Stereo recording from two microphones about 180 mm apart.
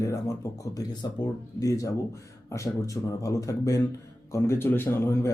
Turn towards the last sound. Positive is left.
turn(degrees=15)  # may be behind; listen again after turning